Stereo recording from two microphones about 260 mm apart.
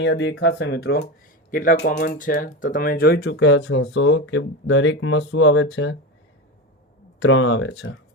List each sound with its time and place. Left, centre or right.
0.0 s speech: left
7.2 s speech: left